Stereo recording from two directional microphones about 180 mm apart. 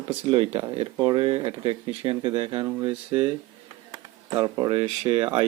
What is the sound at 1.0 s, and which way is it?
Speech, 25° right (ahead or behind).